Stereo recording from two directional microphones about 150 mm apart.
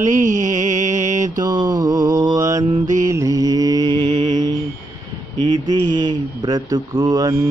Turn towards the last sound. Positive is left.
turn(degrees=-20)  # may be behind; listen again after turning